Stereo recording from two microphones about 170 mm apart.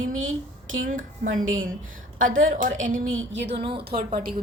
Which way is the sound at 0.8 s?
50° right (ahead or behind).